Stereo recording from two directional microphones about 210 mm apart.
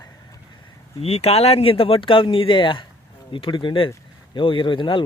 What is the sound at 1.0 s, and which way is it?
Speech, 30° left (ahead or behind).